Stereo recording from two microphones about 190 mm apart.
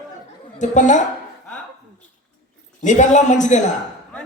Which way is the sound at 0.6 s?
40° left (ahead or behind).